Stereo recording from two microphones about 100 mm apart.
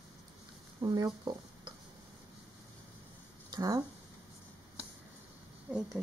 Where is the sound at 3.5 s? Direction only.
35° right (ahead or behind).